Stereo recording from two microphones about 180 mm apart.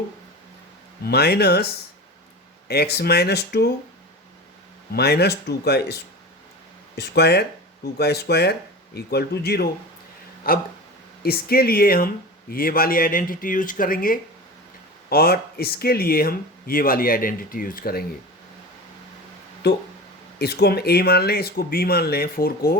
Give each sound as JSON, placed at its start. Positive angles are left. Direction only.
{"t": 1.0, "sound": "speech", "side_deg": 60}
{"t": 2.6, "sound": "speech", "side_deg": 65}
{"t": 4.9, "sound": "speech", "side_deg": 65}
{"t": 19.6, "sound": "speech", "side_deg": 65}